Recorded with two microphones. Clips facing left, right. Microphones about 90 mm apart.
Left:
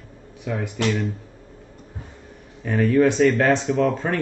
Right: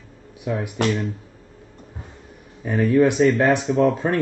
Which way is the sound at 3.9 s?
10° right (ahead or behind).